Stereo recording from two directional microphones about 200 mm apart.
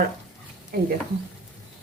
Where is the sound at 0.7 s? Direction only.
50° right (ahead or behind).